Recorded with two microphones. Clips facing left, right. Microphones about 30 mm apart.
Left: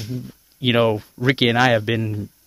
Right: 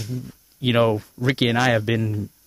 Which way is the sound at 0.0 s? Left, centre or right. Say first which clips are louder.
Left 1 dB; centre.